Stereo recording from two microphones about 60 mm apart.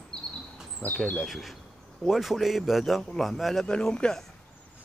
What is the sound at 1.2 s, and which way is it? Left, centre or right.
A man's voice, centre.